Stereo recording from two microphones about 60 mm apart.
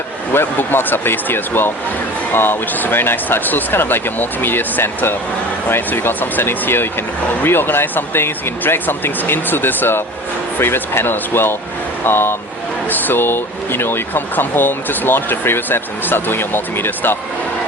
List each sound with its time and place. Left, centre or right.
0.3 s speech: left